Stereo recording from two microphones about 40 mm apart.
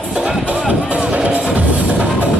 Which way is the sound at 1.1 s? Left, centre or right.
Right.